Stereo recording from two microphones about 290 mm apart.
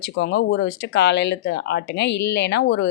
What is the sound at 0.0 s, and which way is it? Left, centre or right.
Speech, left.